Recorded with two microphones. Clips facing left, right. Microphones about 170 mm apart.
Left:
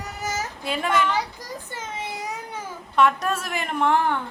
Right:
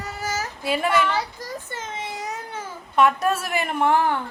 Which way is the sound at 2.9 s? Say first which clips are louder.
Right 2 dB; 5° right (ahead or behind).